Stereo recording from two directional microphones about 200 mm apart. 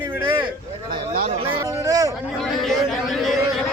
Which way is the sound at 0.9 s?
50° right (ahead or behind).